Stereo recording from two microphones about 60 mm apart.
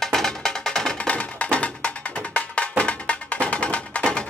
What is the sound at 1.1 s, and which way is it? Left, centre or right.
Music, left.